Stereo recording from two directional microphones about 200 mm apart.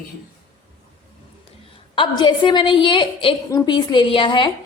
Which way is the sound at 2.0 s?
25° left (ahead or behind).